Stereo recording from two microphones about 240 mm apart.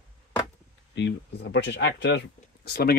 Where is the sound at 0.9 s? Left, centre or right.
Left.